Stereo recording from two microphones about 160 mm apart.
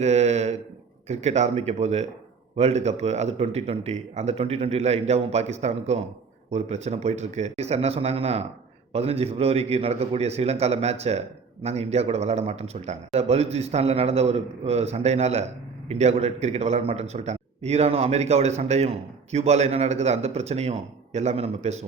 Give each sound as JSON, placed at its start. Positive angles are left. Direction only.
{"t": 0.0, "sound": "a man's voice", "side_deg": -45}